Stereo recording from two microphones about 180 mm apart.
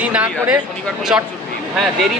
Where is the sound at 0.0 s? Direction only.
5° right (ahead or behind).